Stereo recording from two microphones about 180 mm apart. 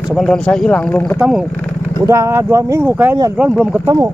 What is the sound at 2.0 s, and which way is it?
Speech, 15° right (ahead or behind).